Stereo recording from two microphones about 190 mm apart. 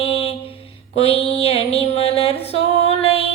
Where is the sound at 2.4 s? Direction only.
30° left (ahead or behind).